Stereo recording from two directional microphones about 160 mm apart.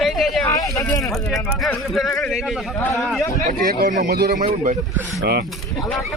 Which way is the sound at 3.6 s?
55° right (ahead or behind).